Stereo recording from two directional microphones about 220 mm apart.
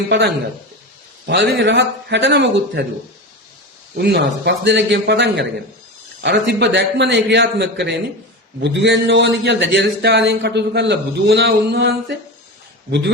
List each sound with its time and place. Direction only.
1.3 s a man's voice: 50° right (ahead or behind)
3.9 s a man's voice: 50° right (ahead or behind)